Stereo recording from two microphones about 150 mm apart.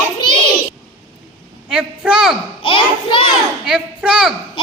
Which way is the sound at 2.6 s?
35° left (ahead or behind).